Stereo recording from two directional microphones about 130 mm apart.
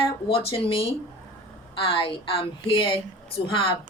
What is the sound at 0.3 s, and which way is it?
A woman's voice, 45° left (ahead or behind).